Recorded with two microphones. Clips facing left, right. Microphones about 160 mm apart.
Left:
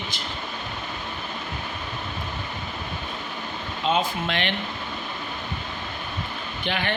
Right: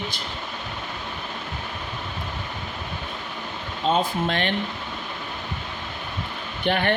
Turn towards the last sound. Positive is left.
turn(degrees=-55)  # may be behind; listen again after turning